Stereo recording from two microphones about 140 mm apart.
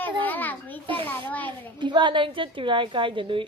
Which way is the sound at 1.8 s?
35° right (ahead or behind).